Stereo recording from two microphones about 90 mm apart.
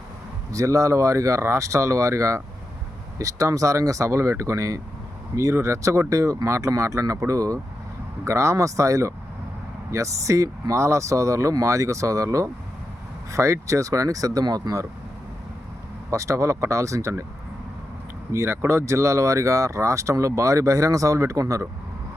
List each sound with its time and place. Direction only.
0.5 s speech: 35° right (ahead or behind)
16.1 s speech: 35° right (ahead or behind)
18.3 s speech: 30° right (ahead or behind)